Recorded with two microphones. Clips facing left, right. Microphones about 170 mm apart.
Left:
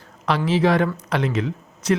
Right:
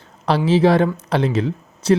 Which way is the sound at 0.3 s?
30° right (ahead or behind).